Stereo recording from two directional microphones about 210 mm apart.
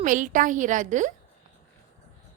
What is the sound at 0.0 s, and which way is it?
A woman's voice, 40° right (ahead or behind).